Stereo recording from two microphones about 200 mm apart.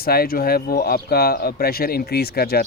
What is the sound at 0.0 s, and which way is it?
Speech, 50° left (ahead or behind).